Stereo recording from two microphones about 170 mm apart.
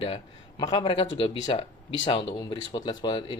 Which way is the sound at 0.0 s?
30° left (ahead or behind).